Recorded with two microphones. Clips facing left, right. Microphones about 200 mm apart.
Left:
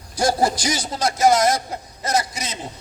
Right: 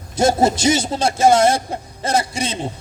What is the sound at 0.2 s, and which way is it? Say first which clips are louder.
A man's voice: right 4 dB; 25° right (ahead or behind).